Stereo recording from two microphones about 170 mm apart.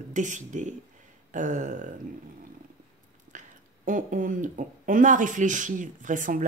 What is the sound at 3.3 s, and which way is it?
Speech, 50° right (ahead or behind).